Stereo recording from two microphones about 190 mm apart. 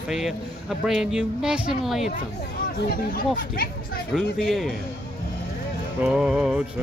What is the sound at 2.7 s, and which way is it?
Speech, 50° left (ahead or behind).